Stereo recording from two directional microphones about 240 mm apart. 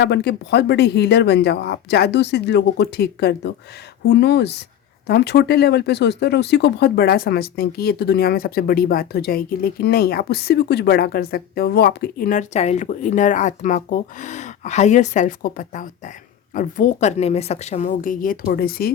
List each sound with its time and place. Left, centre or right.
0.0 s speech: left